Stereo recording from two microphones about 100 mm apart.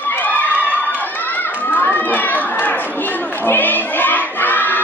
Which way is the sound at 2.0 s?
15° left (ahead or behind).